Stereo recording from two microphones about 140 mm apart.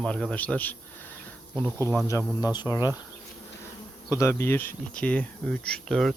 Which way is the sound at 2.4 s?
30° left (ahead or behind).